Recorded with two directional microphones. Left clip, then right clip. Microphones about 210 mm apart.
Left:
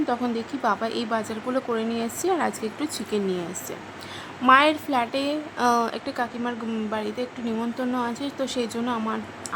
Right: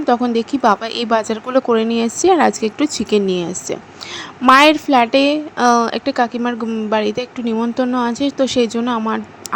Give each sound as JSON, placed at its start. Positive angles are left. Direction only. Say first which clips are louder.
{"t": 0.0, "sound": "speech", "louder": "right 10 dB", "side_deg": -20}
{"t": 4.4, "sound": "speech", "louder": "right 8 dB", "side_deg": -20}